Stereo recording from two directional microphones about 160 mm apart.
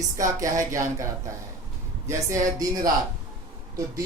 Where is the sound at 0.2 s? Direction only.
20° right (ahead or behind).